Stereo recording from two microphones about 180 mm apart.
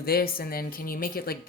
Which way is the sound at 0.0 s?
55° left (ahead or behind).